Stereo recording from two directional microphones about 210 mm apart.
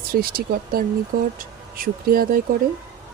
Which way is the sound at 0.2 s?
45° right (ahead or behind).